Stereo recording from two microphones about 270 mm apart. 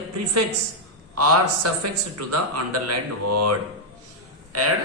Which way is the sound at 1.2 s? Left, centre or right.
Right.